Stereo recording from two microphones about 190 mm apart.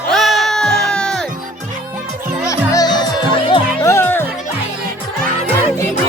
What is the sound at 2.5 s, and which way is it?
Music, 20° left (ahead or behind).